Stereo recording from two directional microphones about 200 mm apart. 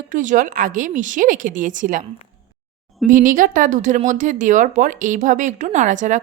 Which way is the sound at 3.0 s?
40° right (ahead or behind).